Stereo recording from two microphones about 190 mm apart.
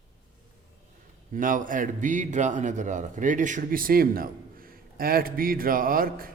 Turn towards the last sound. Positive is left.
turn(degrees=-50)  # may be behind; listen again after turning